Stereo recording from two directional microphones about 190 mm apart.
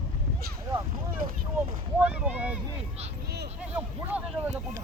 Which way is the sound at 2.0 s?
5° right (ahead or behind).